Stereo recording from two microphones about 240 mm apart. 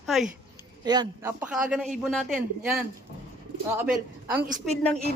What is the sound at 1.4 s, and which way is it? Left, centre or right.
A man's voice, centre.